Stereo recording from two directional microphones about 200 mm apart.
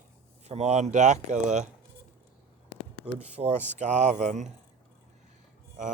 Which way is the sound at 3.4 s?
35° right (ahead or behind).